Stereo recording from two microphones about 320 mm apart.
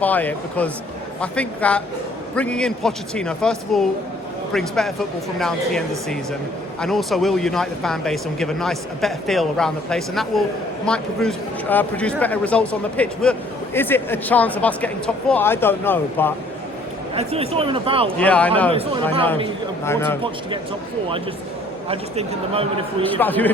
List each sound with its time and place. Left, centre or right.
0.0 s speech: centre
17.2 s speech: centre
18.2 s speech: centre
19.8 s speech: centre
21.8 s speech: centre
23.0 s speech: centre